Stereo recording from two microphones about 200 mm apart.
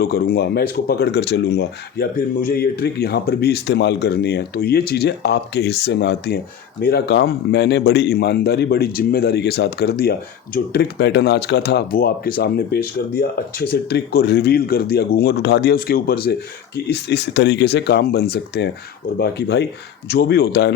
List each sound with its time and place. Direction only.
0.0 s a man's voice: 50° left (ahead or behind)